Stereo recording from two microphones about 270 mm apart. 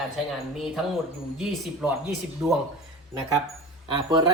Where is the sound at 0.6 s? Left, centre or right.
Centre.